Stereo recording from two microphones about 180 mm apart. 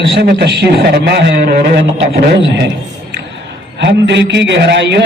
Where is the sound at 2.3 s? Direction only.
70° right (ahead or behind).